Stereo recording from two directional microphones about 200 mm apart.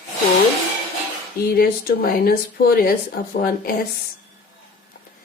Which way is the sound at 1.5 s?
50° left (ahead or behind).